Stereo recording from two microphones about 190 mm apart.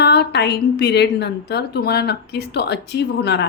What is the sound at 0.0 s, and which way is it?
A woman's voice, 60° left (ahead or behind).